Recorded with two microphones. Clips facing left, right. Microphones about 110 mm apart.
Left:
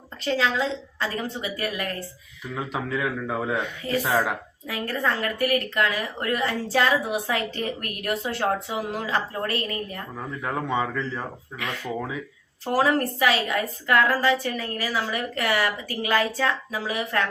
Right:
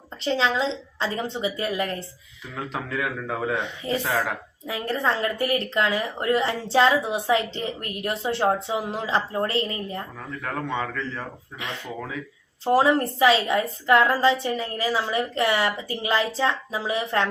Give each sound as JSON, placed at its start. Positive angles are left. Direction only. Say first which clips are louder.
{"t": 0.3, "sound": "a woman's voice", "louder": "right 1 dB", "side_deg": -25}
{"t": 2.6, "sound": "a man's voice", "louder": "left 1 dB", "side_deg": 5}
{"t": 3.8, "sound": "a woman's voice", "louder": "left 2 dB", "side_deg": -30}
{"t": 10.4, "sound": "a man's voice", "louder": "left 2 dB", "side_deg": 15}
{"t": 12.6, "sound": "a woman's voice", "louder": "right 3 dB", "side_deg": -25}